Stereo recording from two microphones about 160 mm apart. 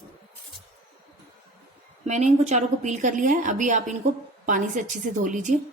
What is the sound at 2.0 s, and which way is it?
A woman's voice, 50° right (ahead or behind).